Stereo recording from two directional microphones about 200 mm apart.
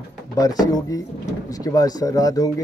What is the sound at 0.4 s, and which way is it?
A man's voice, 20° left (ahead or behind).